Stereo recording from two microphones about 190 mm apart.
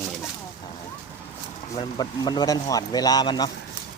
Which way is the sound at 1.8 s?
25° left (ahead or behind).